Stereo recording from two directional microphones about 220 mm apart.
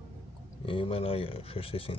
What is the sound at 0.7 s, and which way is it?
Speech, 25° left (ahead or behind).